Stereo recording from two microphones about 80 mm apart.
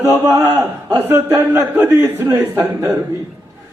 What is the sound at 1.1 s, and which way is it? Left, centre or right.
A man's voice, right.